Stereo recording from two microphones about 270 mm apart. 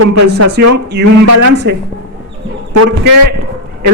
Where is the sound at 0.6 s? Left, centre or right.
Right.